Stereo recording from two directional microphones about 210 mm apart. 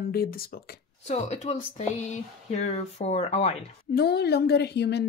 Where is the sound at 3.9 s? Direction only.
50° left (ahead or behind).